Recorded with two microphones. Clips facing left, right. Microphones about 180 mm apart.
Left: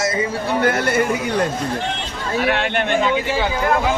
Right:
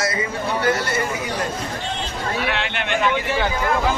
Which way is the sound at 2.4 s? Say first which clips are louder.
Left 5 dB; 50° left (ahead or behind).